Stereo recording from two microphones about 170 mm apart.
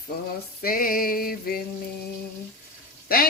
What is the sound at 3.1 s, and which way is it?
Speech, 60° left (ahead or behind).